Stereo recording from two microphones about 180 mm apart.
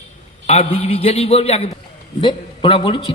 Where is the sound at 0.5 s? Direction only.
35° left (ahead or behind).